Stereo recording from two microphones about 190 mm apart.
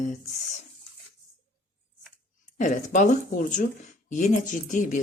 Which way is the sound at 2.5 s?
40° left (ahead or behind).